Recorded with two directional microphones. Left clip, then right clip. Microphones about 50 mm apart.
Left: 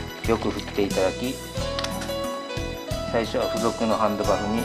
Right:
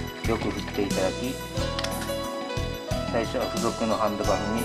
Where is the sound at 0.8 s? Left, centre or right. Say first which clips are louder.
Left 3 dB; left.